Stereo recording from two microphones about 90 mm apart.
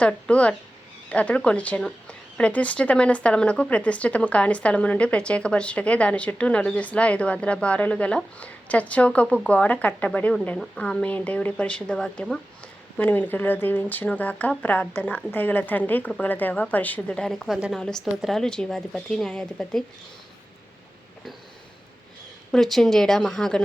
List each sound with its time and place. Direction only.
0.0 s speech: 15° left (ahead or behind)
17.5 s speech: 5° right (ahead or behind)
17.7 s speech: 10° left (ahead or behind)
22.5 s speech: 5° left (ahead or behind)